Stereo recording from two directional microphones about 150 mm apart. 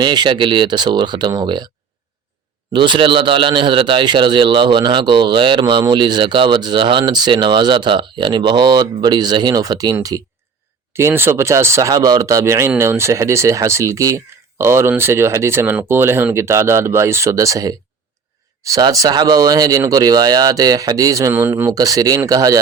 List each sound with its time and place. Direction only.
0.0 s a man's voice: 30° right (ahead or behind)
2.7 s a man's voice: 30° right (ahead or behind)